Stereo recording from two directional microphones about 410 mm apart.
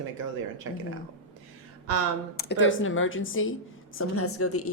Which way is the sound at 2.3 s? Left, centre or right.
Left.